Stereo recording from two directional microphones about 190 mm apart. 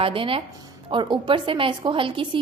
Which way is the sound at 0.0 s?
30° right (ahead or behind).